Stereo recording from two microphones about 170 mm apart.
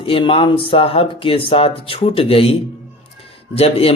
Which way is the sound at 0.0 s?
30° left (ahead or behind).